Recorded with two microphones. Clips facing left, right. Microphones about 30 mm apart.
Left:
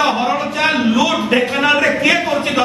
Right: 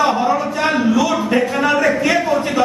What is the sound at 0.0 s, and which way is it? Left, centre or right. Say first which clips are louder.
A man's voice: even; left.